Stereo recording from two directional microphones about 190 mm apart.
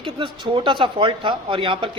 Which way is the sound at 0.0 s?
25° right (ahead or behind).